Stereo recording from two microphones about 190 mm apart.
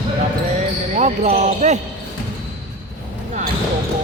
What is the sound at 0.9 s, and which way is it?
Speech, 40° right (ahead or behind).